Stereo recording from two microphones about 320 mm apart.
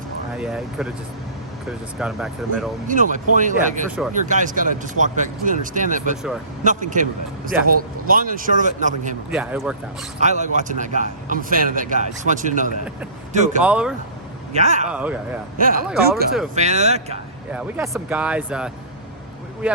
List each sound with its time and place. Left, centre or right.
0.3 s speech: centre
2.0 s speech: centre
2.8 s speech: right
3.8 s speech: centre
4.3 s speech: right
9.3 s speech: centre
10.2 s speech: right
13.6 s speech: centre
14.5 s speech: right
14.8 s speech: centre
15.5 s speech: right
17.5 s speech: centre